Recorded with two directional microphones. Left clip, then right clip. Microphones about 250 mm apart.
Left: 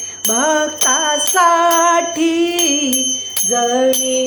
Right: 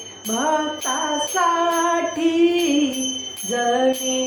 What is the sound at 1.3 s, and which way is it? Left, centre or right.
Music, left.